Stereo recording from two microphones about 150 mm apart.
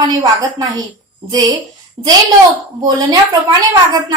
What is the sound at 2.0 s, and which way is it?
A woman's voice, 25° right (ahead or behind).